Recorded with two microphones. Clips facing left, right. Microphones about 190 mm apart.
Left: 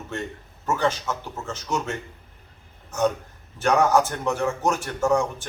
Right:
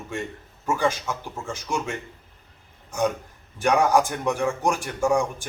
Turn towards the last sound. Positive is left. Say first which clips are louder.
# even
turn(degrees=-10)  # may be behind; listen again after turning